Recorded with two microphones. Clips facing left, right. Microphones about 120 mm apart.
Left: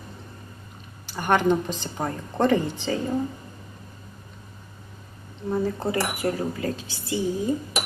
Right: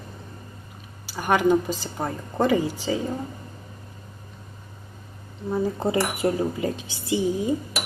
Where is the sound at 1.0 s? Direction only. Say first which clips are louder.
Right 1 dB; 5° right (ahead or behind).